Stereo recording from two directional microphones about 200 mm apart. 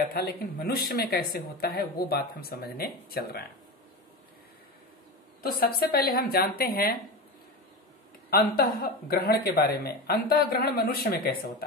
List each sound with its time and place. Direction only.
0.1 s speech: 50° left (ahead or behind)
5.4 s speech: 50° left (ahead or behind)
8.3 s speech: 50° left (ahead or behind)